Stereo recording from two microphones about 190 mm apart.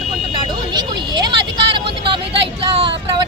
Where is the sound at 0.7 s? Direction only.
20° right (ahead or behind).